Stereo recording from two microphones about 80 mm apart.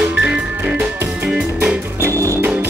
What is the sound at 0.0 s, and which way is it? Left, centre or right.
Music, centre.